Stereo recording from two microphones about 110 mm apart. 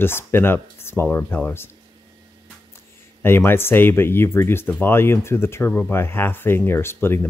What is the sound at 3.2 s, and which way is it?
Speech, 20° left (ahead or behind).